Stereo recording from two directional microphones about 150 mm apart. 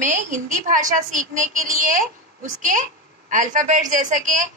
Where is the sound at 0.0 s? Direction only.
60° right (ahead or behind).